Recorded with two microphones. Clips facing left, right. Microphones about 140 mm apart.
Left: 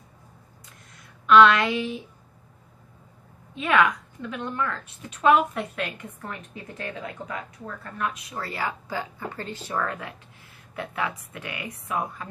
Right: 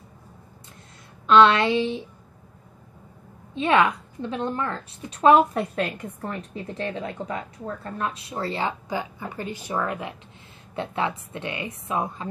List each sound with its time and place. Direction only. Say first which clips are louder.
1.2 s a woman's voice: even; 30° right (ahead or behind)
3.5 s a woman's voice: right 2 dB; 30° right (ahead or behind)